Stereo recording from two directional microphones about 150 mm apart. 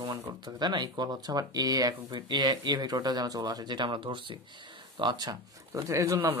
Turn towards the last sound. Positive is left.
turn(degrees=-20)  # may be behind; listen again after turning